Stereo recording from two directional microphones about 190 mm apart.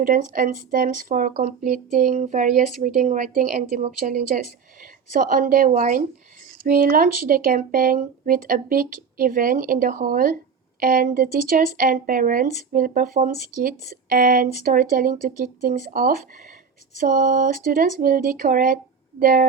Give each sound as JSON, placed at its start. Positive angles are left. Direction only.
{"t": 0.0, "sound": "speech", "side_deg": -45}